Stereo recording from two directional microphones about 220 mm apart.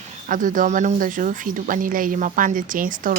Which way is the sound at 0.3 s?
35° right (ahead or behind).